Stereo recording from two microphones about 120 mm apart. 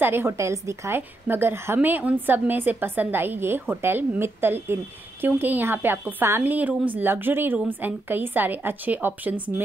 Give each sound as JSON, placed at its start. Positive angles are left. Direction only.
{"t": 0.0, "sound": "a woman's voice", "side_deg": -20}